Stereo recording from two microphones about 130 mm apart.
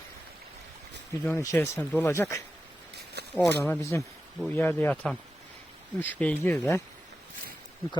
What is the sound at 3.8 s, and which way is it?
Speech, 25° left (ahead or behind).